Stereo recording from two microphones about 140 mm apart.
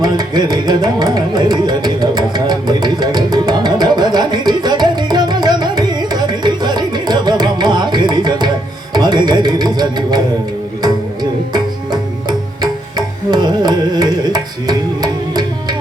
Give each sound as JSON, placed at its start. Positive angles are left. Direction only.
{"t": 0.0, "sound": "carnatic music", "side_deg": -30}
{"t": 8.9, "sound": "music", "side_deg": -30}
{"t": 13.3, "sound": "carnatic music", "side_deg": -30}